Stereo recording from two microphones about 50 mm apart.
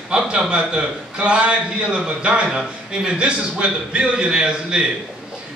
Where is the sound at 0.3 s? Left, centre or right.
Centre.